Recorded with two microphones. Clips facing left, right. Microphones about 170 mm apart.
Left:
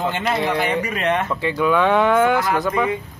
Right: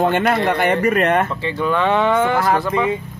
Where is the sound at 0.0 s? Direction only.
60° right (ahead or behind).